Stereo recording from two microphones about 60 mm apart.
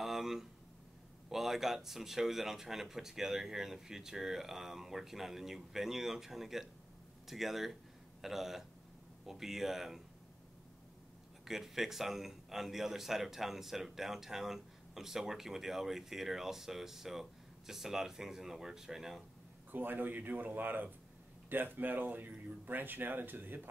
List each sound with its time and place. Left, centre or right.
0.0 s a sound: centre
1.3 s a man's voice: centre
11.4 s a man's voice: centre
19.7 s speech: right